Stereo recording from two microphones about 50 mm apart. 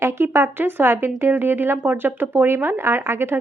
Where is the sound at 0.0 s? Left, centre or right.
Right.